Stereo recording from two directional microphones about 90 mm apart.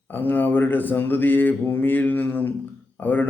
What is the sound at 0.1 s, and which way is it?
A man's voice, 20° left (ahead or behind).